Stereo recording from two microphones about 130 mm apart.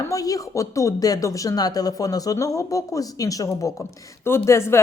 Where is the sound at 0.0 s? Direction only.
25° left (ahead or behind).